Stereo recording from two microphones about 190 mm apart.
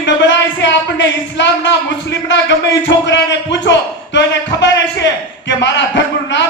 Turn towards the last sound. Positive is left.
turn(degrees=70)  # may be behind; listen again after turning